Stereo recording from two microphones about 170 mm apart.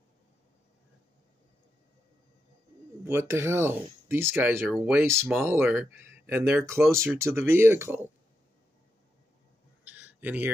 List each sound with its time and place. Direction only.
3.1 s speech: 15° right (ahead or behind)
5.0 s speech: 15° right (ahead or behind)
9.8 s a sound: 10° right (ahead or behind)